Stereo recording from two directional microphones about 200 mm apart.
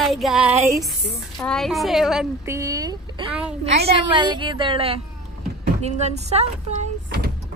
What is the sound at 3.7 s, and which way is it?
A woman's voice, 30° right (ahead or behind).